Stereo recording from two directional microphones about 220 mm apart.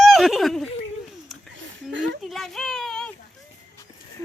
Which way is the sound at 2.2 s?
Centre (ahead or behind).